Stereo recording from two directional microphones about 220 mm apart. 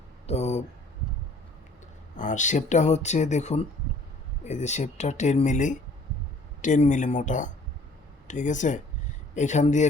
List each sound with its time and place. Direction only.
0.3 s speech: 30° left (ahead or behind)
2.1 s speech: 35° left (ahead or behind)